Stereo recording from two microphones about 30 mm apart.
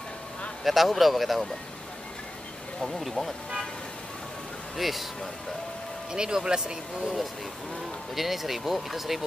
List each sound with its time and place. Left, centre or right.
0.7 s speech: centre
2.8 s speech: centre
4.7 s speech: centre
6.1 s speech: right
8.1 s speech: centre